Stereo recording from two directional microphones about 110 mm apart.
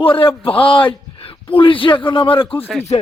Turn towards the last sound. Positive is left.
turn(degrees=65)  # may be behind; listen again after turning